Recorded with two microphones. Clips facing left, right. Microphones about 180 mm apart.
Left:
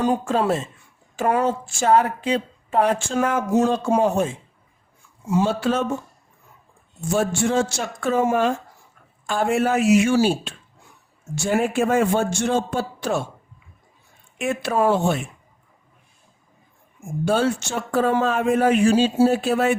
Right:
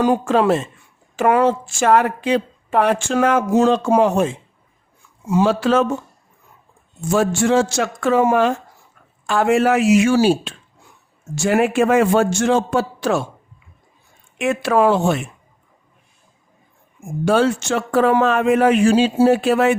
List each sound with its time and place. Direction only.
0.0 s a woman's voice: 85° right
7.1 s a woman's voice: 90° right
14.3 s a woman's voice: 90° right
17.2 s a man's voice: 90° right